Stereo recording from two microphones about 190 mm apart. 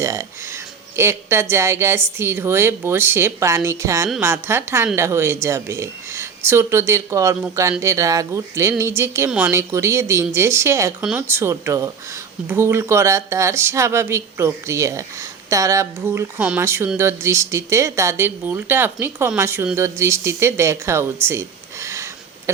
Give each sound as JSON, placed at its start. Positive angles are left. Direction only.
{"t": 0.0, "sound": "speech", "side_deg": -15}